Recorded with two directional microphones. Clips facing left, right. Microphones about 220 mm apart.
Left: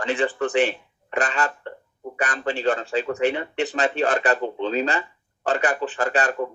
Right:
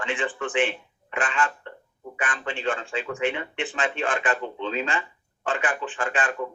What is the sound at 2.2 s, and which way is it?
Speech, 40° left (ahead or behind).